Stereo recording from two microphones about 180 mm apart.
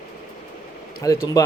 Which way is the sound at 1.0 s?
20° left (ahead or behind).